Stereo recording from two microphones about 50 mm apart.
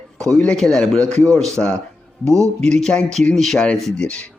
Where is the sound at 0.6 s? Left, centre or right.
Centre.